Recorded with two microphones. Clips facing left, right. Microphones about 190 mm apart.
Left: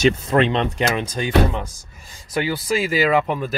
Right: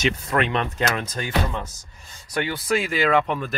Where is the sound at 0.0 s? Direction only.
25° left (ahead or behind).